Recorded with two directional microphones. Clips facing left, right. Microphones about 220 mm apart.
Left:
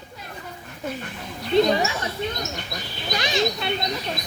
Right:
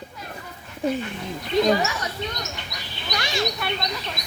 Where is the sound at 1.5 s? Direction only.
30° left (ahead or behind).